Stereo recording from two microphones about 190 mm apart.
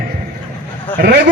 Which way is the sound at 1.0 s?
50° right (ahead or behind).